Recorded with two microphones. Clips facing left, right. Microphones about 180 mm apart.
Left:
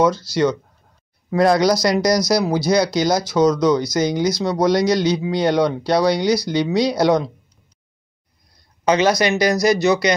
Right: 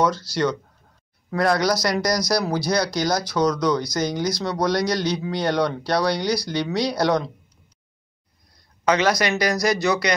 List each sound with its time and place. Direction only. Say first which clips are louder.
0.0 s speech: left 4 dB; 15° left (ahead or behind)
2.2 s speech: left 5 dB; 10° left (ahead or behind)
3.3 s speech: left 6 dB; 25° left (ahead or behind)
3.8 s speech: left 5 dB; 10° left (ahead or behind)
4.6 s speech: left 6 dB; 20° left (ahead or behind)
8.8 s speech: left 4 dB; 25° left (ahead or behind)